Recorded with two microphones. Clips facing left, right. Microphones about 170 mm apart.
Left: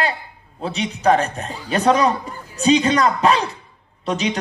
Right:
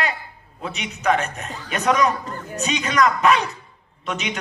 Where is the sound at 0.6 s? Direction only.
30° left (ahead or behind).